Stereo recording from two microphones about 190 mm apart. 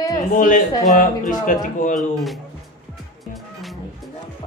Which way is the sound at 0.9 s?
45° left (ahead or behind).